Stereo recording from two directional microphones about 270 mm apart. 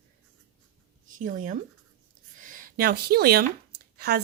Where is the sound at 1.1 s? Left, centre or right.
Right.